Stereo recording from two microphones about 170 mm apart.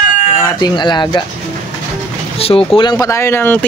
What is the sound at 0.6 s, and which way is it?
Speech, 25° left (ahead or behind).